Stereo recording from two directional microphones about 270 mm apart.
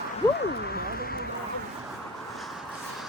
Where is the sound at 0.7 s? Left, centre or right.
Left.